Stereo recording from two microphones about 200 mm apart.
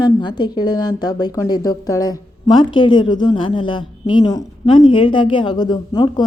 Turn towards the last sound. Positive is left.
turn(degrees=20)  # may be behind; listen again after turning